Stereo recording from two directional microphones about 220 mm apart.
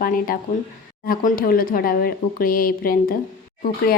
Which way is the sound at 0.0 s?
40° left (ahead or behind).